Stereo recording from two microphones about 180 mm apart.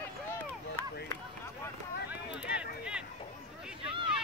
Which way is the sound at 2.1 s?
5° right (ahead or behind).